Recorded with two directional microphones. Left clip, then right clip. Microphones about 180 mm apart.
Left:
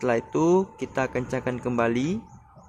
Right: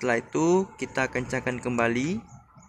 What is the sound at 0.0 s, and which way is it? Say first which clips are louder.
Speech: left 2 dB; 10° left (ahead or behind).